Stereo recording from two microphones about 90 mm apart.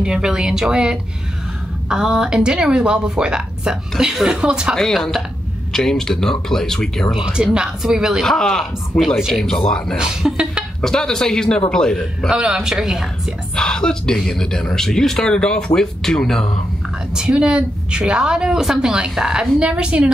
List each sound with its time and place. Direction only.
0.0 s a woman's voice: 5° right (ahead or behind)
4.7 s a man's voice: 5° left (ahead or behind)
7.2 s a woman's voice: 5° right (ahead or behind)
8.3 s speech: 5° left (ahead or behind)
9.9 s a woman's voice: 5° right (ahead or behind)
10.8 s a man's voice: 5° left (ahead or behind)
12.3 s a woman's voice: 10° right (ahead or behind)
13.6 s speech: 10° left (ahead or behind)
17.1 s a woman's voice: 10° right (ahead or behind)